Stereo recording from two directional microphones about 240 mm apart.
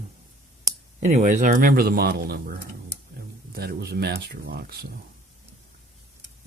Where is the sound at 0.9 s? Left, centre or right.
Right.